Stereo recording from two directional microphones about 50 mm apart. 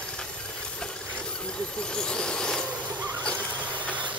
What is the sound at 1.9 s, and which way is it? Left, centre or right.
Vehicle, centre.